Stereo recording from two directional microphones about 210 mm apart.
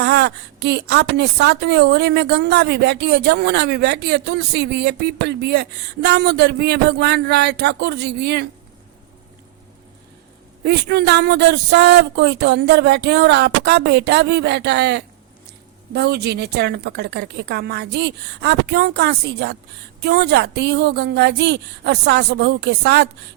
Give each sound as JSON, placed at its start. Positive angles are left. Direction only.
{"t": 0.0, "sound": "a woman's voice", "side_deg": -55}
{"t": 10.6, "sound": "a woman's voice", "side_deg": -50}